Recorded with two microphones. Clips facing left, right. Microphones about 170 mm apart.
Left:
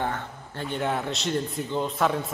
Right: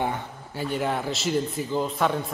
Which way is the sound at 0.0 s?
10° right (ahead or behind).